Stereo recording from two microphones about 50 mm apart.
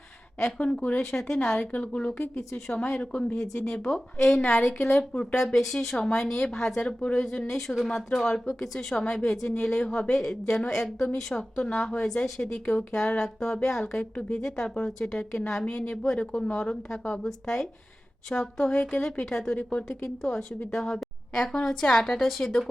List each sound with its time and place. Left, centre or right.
0.9 s a woman's voice: centre
1.5 s a woman's voice: left; by 2.8 s centre
2.9 s a woman's voice: left
10.4 s a woman's voice: left
12.0 s a woman's voice: centre
13.8 s a woman's voice: left
14.3 s a woman's voice: centre
16.0 s a woman's voice: centre
18.8 s a woman's voice: left
19.2 s a woman's voice: centre